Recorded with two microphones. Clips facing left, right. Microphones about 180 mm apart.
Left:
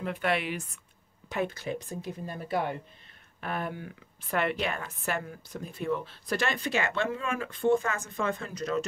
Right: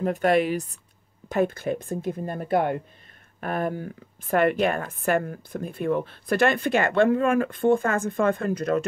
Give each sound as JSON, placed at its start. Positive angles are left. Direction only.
{"t": 0.0, "sound": "a woman's voice", "side_deg": -45}
{"t": 1.3, "sound": "a woman's voice", "side_deg": -50}